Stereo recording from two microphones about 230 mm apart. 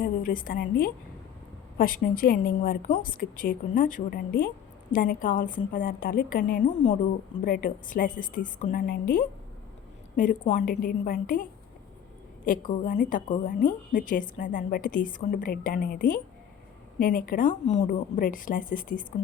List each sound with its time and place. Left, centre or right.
0.0 s a woman's voice: left
12.5 s a woman's voice: left